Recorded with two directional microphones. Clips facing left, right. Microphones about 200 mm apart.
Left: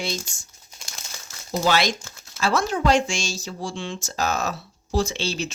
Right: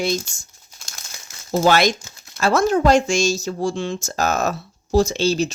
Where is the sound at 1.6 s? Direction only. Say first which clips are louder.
Right 5 dB; 50° right (ahead or behind).